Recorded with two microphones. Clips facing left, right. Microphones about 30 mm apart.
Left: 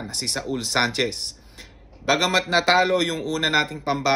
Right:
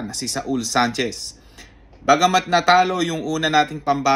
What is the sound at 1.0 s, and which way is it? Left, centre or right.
Speech, left.